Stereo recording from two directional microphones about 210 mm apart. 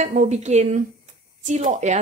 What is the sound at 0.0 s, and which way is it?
Speech, 35° right (ahead or behind).